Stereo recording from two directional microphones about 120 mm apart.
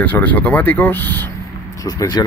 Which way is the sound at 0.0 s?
15° left (ahead or behind).